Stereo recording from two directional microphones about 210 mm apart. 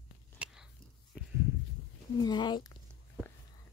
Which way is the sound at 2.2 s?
20° left (ahead or behind).